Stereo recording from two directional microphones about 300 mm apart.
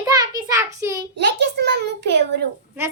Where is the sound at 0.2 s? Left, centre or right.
Centre.